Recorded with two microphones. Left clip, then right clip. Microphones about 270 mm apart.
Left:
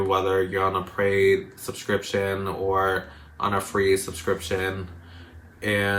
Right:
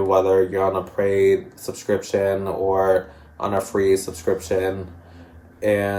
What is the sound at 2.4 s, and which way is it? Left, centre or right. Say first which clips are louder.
Speech: right 4 dB; left.